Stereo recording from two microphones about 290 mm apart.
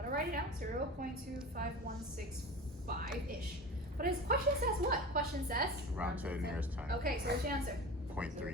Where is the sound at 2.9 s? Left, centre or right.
Right.